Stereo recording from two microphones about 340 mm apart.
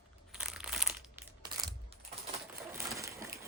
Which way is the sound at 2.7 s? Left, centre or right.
Centre.